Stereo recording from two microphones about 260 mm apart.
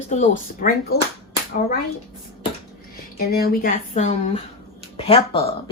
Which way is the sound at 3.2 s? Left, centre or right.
Left.